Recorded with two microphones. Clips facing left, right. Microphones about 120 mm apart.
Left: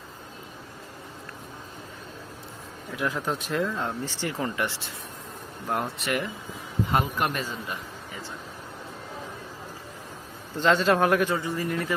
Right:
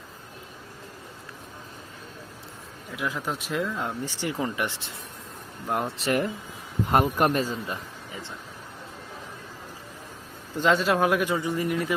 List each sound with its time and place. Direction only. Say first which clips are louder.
2.9 s speech: left 2 dB; centre (ahead or behind); by 6.1 s 20° right (ahead or behind)
6.1 s speech: right 4 dB; 40° right (ahead or behind)
7.7 s a sound: right 1 dB; 25° right (ahead or behind)
10.6 s speech: left 1 dB; 10° right (ahead or behind)